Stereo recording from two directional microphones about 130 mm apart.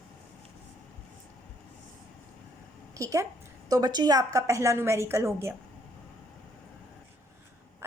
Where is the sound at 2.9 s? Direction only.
25° right (ahead or behind).